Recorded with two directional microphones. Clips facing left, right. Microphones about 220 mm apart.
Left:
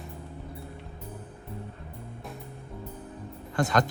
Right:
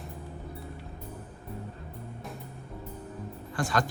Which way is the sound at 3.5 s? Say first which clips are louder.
Left 4 dB; 20° left (ahead or behind).